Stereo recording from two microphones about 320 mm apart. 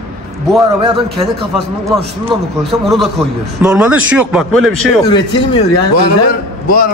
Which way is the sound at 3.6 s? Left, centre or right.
Centre.